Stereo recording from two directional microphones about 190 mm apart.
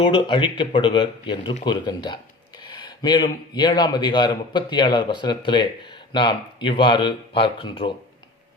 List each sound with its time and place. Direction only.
0.0 s a man's voice: 25° left (ahead or behind)